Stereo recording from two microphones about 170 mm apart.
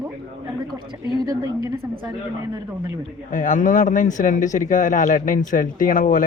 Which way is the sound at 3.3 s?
50° left (ahead or behind).